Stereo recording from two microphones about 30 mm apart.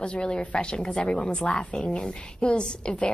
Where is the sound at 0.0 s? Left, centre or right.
Left.